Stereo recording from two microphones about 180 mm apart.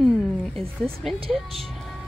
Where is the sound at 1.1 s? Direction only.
30° right (ahead or behind).